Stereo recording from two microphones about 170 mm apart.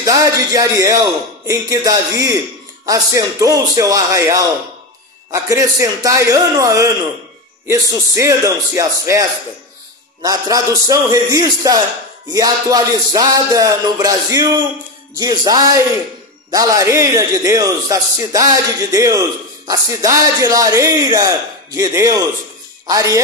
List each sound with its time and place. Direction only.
0.0 s a man's voice: 20° right (ahead or behind)
10.2 s a man's voice: 20° right (ahead or behind)